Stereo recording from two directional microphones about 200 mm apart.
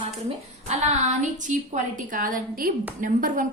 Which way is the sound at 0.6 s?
35° right (ahead or behind).